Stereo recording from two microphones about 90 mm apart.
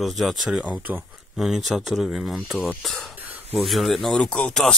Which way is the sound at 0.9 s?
20° right (ahead or behind).